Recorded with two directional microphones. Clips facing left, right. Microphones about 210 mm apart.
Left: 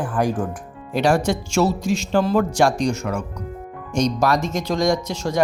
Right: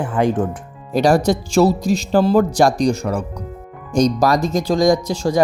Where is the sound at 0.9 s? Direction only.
35° right (ahead or behind).